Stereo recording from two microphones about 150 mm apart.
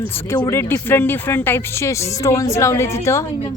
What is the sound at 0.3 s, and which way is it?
A woman's voice, 20° left (ahead or behind).